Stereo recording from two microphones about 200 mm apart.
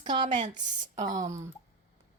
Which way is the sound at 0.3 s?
35° right (ahead or behind).